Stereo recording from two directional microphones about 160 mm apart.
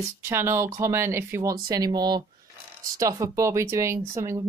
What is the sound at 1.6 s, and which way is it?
Speech, 25° right (ahead or behind).